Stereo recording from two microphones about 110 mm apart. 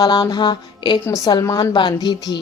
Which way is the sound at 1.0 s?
30° left (ahead or behind).